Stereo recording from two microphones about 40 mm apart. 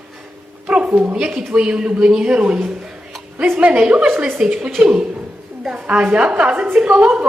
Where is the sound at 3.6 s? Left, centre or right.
Right.